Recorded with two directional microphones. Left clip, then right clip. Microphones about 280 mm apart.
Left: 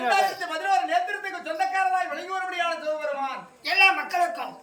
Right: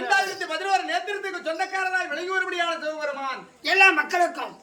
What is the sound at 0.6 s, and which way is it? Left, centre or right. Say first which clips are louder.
A man's voice: left 2 dB; centre.